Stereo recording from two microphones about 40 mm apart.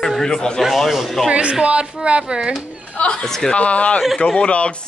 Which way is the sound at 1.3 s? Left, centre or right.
Right.